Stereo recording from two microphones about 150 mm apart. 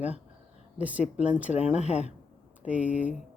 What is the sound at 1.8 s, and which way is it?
Speech, 45° left (ahead or behind).